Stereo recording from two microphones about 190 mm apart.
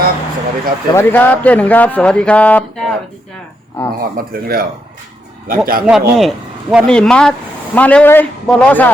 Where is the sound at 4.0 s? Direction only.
50° right (ahead or behind).